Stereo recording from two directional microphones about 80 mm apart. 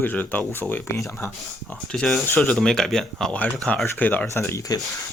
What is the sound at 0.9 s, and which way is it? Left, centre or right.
Speech, left.